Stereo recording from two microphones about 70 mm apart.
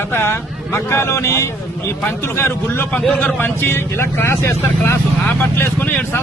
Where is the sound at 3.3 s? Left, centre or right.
Left.